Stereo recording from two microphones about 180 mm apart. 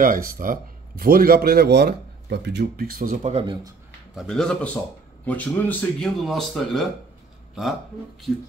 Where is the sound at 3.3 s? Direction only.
30° right (ahead or behind).